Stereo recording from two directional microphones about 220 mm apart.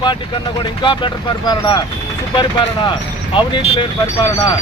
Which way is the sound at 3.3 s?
25° left (ahead or behind).